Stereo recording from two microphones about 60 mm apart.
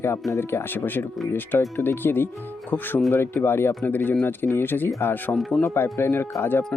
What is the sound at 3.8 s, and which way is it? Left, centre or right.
Speech, left.